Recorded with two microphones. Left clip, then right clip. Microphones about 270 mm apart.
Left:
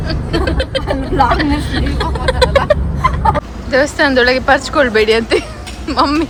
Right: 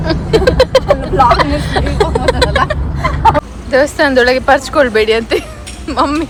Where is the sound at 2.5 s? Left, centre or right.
Centre.